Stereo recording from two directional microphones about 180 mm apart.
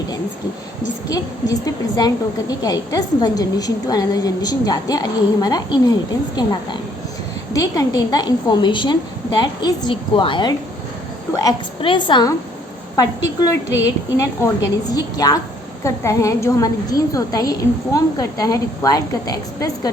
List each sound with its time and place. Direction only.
1.0 s a woman's voice: 20° left (ahead or behind)